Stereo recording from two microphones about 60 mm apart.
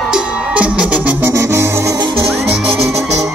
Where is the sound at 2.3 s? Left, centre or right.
Centre.